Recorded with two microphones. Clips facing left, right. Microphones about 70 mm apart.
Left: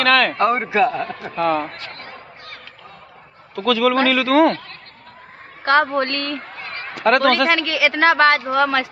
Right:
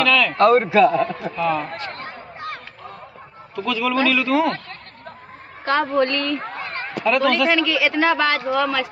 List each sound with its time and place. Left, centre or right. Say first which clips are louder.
0.0 s speech: left 2 dB; left
0.4 s a man's voice: right 3 dB; left
1.3 s speech: left 6 dB; left
1.7 s speech: right 4 dB; right
2.0 s a sound: right 6 dB; right
3.6 s a man's voice: left 4 dB; left
5.7 s speech: left 2 dB; left
7.0 s speech: left 3 dB; left